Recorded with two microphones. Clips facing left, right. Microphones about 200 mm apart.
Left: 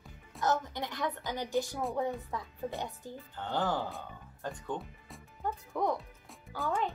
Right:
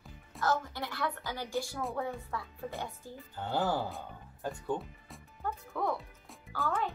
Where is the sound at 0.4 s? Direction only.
20° left (ahead or behind).